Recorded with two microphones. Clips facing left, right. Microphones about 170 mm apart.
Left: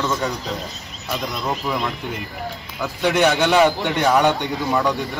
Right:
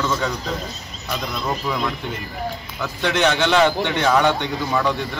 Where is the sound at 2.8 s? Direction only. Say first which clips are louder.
Left 2 dB; 10° left (ahead or behind).